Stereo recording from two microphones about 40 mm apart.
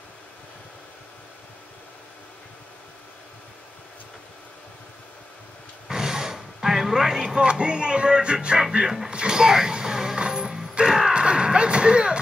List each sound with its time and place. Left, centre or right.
5.9 s music: centre
8.8 s speech: centre
9.1 s music: right